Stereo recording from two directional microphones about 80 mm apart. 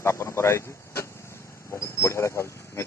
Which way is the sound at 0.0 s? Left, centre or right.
Left.